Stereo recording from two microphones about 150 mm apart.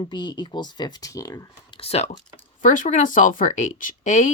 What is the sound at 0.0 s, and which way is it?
Speech, 30° left (ahead or behind).